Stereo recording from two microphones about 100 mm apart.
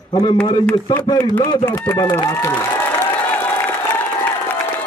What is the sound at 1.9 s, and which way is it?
Speech, 25° left (ahead or behind).